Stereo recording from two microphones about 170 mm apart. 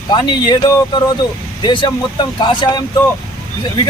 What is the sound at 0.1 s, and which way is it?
Speech, 25° left (ahead or behind).